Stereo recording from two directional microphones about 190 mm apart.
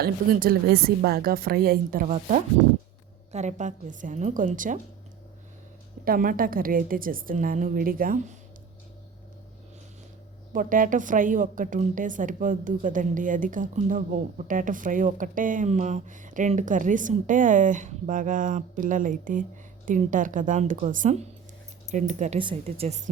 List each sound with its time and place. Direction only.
0.0 s a woman's voice: 55° right (ahead or behind)
6.1 s a woman's voice: 45° right (ahead or behind)
10.5 s a woman's voice: 45° right (ahead or behind)
22.4 s a woman's voice: 30° right (ahead or behind)